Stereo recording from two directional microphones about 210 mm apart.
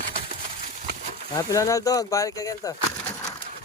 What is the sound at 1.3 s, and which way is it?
Speech, 15° left (ahead or behind).